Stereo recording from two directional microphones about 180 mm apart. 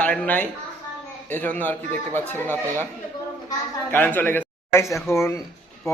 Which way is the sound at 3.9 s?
10° left (ahead or behind).